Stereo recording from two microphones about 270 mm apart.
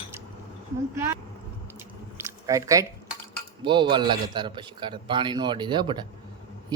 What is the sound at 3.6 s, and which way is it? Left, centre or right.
A man's voice, centre.